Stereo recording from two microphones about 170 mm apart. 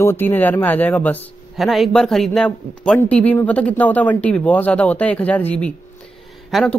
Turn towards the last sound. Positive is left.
turn(degrees=0)  # may be behind; listen again after turning